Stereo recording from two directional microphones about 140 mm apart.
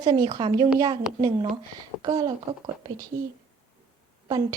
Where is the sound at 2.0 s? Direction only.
25° right (ahead or behind).